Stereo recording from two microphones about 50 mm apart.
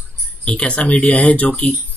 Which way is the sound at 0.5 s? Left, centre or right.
Left.